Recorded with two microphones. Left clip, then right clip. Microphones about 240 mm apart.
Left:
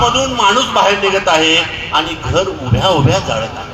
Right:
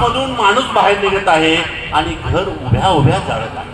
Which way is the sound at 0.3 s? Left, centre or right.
Left.